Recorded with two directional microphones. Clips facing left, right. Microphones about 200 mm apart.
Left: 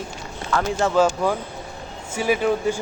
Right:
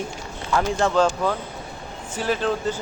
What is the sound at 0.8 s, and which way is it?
Speech, 5° left (ahead or behind).